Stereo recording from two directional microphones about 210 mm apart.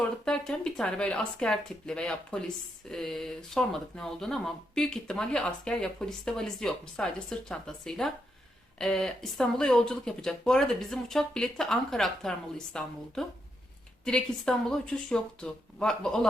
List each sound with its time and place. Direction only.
0.3 s speech: 5° left (ahead or behind)